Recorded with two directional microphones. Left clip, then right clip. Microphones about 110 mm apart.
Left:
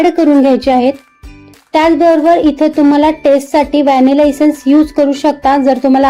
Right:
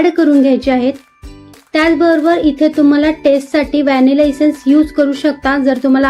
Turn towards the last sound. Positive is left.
turn(degrees=35)  # may be behind; listen again after turning